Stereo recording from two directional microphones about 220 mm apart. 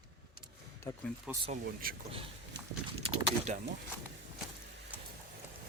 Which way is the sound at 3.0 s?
30° right (ahead or behind).